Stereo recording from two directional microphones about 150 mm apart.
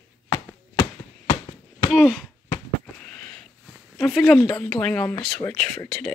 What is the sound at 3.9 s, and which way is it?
Speech, 5° left (ahead or behind).